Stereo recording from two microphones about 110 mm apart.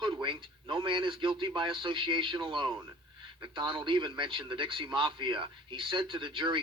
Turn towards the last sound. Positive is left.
turn(degrees=-45)  # may be behind; listen again after turning